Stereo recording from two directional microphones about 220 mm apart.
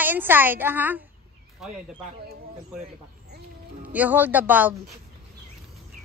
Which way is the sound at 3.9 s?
10° right (ahead or behind).